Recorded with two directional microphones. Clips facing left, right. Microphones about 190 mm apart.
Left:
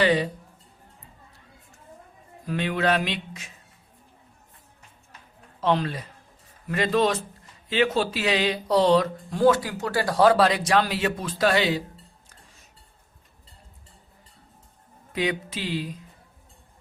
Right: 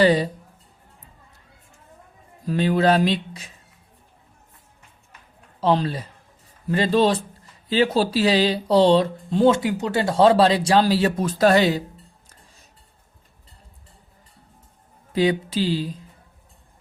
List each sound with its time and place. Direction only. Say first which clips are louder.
0.0 s mantra: right 4 dB; 35° right (ahead or behind)
2.5 s mantra: right 5 dB; 35° right (ahead or behind)
5.5 s mantra: right 3 dB; 35° right (ahead or behind)
7.7 s speech: right 4 dB; 35° right (ahead or behind)
15.1 s mantra: right 7 dB; 30° right (ahead or behind)